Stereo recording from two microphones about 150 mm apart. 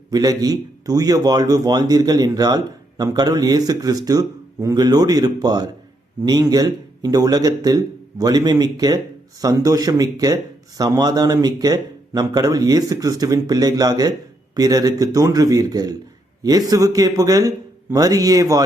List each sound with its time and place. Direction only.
0.1 s a man's voice: 25° right (ahead or behind)